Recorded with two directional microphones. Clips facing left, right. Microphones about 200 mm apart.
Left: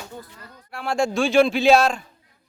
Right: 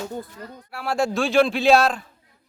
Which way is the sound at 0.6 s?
5° right (ahead or behind).